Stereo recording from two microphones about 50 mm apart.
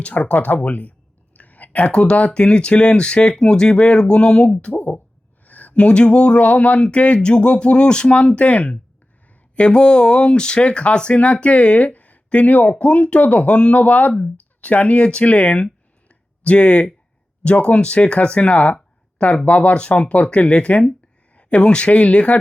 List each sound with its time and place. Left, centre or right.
0.0 s speech: left
4.6 s speech: left
16.0 s a sound: left
17.4 s speech: left